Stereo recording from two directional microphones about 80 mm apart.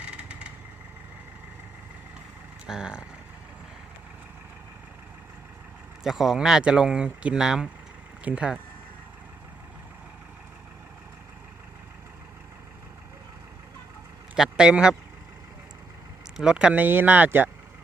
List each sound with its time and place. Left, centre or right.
0.0 s vehicle: centre
2.6 s speech: centre
6.0 s speech: centre
14.3 s speech: centre
16.4 s speech: centre